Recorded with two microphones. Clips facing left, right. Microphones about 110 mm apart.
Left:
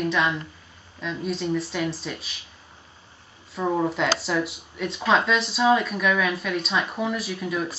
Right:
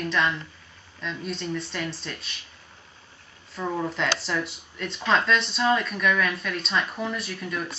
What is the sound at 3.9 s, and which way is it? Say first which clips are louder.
Speech: left 3 dB; 5° left (ahead or behind).